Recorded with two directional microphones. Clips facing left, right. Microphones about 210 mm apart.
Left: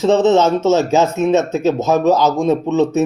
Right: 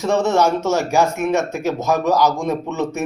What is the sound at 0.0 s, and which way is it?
Speech, 20° left (ahead or behind).